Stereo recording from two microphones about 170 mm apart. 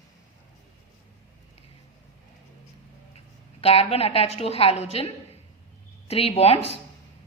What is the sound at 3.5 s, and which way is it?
Speech, 35° left (ahead or behind).